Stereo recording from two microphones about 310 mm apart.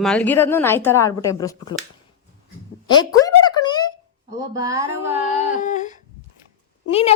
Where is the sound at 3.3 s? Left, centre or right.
Centre.